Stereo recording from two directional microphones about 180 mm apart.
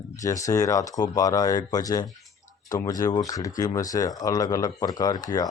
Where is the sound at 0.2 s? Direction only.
20° left (ahead or behind).